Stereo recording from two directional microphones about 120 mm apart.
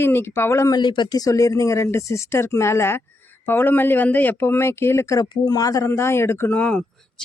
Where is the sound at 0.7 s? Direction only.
40° left (ahead or behind).